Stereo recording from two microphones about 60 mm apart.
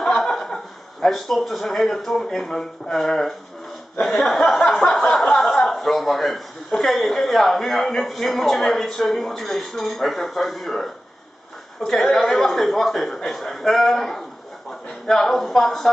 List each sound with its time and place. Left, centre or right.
0.0 s chuckle: centre
1.0 s speech: centre